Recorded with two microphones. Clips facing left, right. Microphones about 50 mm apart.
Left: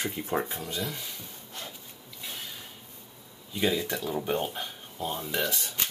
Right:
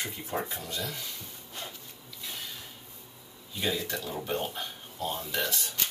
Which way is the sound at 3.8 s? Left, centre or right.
Centre.